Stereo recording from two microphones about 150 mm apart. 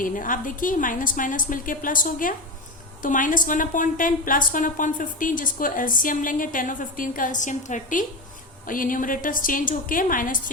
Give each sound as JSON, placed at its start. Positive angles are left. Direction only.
{"t": 0.0, "sound": "a woman's voice", "side_deg": 60}